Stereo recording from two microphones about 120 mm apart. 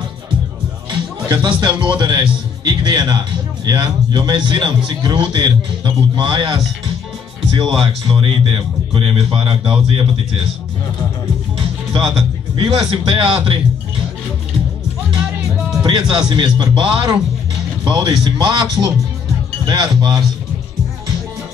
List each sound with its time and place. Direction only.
1.3 s a man's voice: 40° right (ahead or behind)
11.9 s music: 35° right (ahead or behind)
12.6 s a man's voice: 45° right (ahead or behind)
15.8 s speech: 35° right (ahead or behind)